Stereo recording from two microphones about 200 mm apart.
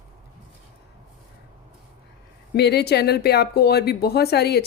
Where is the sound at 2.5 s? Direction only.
55° left (ahead or behind).